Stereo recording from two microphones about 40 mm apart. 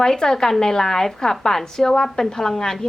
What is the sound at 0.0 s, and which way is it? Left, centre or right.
A woman's voice, centre.